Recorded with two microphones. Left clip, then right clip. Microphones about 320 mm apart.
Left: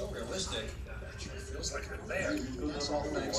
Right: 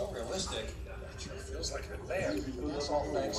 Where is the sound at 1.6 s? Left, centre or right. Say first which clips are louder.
Even; right.